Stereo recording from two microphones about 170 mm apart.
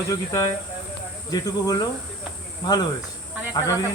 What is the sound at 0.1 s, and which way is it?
A man's voice, 20° left (ahead or behind).